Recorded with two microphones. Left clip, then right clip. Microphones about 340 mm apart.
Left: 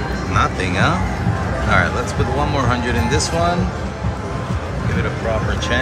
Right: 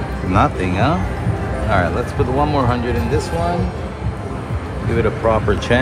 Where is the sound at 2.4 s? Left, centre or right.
Centre.